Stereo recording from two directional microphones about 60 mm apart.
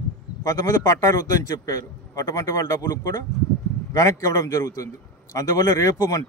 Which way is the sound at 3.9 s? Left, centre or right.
Left.